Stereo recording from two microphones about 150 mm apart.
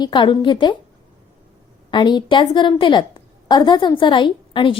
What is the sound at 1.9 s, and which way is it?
A woman's voice, 30° left (ahead or behind).